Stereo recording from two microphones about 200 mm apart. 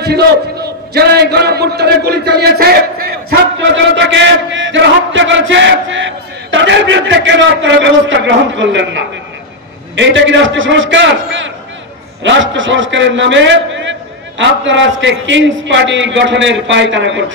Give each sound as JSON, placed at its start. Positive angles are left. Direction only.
{"t": 0.0, "sound": "a man's voice", "side_deg": -55}
{"t": 3.9, "sound": "battle cry", "side_deg": -65}
{"t": 6.5, "sound": "a man's voice", "side_deg": -65}